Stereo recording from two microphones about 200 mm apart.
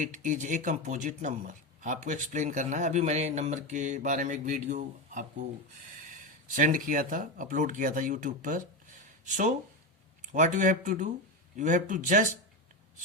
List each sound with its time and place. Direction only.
0.0 s speech: 40° right (ahead or behind)